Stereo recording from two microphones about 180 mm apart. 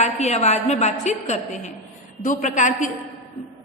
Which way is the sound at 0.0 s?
40° left (ahead or behind).